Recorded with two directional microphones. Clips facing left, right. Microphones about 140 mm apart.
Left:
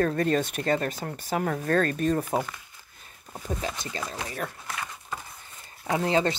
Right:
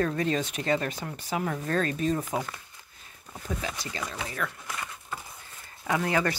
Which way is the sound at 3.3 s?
40° left (ahead or behind).